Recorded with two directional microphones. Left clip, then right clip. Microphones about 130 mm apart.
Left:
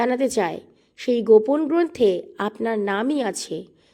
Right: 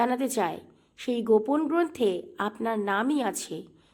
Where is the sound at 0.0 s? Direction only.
40° left (ahead or behind).